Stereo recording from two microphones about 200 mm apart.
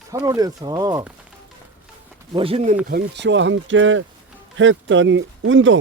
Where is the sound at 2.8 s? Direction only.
55° right (ahead or behind).